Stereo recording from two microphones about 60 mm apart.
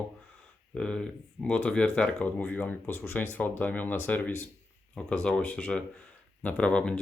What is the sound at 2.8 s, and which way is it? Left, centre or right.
Speech, left.